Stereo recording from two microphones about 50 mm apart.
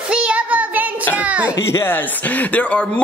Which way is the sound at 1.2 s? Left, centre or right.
Right.